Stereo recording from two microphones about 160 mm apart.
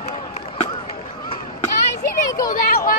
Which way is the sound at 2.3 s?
20° left (ahead or behind).